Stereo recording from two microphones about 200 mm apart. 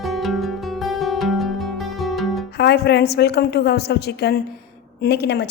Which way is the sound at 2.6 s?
55° left (ahead or behind).